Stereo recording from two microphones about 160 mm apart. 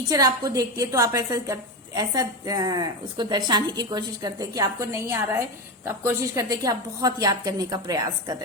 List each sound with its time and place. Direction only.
0.1 s a woman's voice: 20° right (ahead or behind)